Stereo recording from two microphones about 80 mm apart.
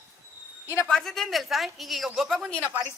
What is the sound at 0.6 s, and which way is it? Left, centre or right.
Speech, left.